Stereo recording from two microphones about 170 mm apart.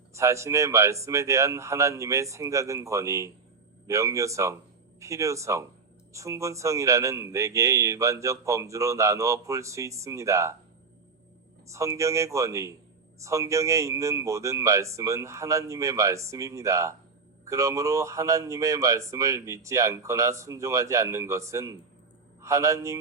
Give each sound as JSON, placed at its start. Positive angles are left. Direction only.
{"t": 0.1, "sound": "a man's voice", "side_deg": -15}
{"t": 11.7, "sound": "a man's voice", "side_deg": -20}